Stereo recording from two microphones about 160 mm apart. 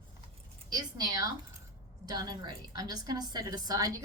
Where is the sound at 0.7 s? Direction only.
25° right (ahead or behind).